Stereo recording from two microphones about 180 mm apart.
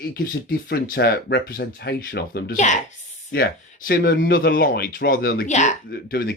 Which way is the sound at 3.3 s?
65° left (ahead or behind).